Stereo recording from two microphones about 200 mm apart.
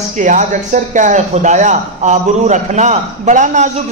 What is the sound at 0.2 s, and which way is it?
A man's voice, 40° right (ahead or behind).